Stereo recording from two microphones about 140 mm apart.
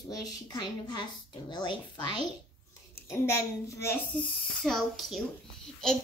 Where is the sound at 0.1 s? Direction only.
25° left (ahead or behind).